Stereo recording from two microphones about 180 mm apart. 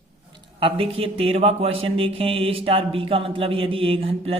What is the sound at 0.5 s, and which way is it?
Speech, 30° right (ahead or behind).